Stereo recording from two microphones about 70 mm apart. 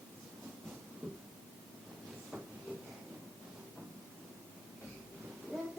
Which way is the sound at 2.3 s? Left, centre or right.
Centre.